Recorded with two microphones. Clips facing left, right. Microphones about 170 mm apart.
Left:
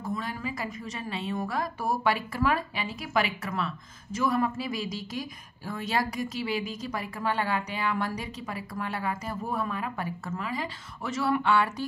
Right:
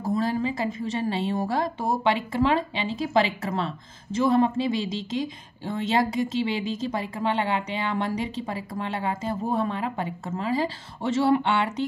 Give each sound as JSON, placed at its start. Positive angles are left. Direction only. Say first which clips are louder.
{"t": 0.0, "sound": "a woman's voice", "louder": "right 8 dB", "side_deg": -30}